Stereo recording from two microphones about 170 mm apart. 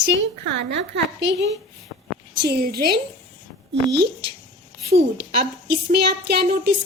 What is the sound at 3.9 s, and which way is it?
Speech, 80° right.